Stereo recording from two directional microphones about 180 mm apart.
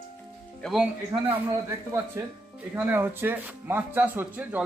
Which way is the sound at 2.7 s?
10° right (ahead or behind).